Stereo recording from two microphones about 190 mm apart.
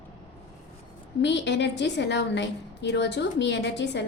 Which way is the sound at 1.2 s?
65° left (ahead or behind).